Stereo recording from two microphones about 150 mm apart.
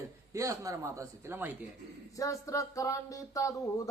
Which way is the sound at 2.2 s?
20° left (ahead or behind).